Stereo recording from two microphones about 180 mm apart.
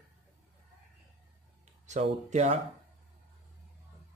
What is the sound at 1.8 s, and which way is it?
Speech, 40° right (ahead or behind).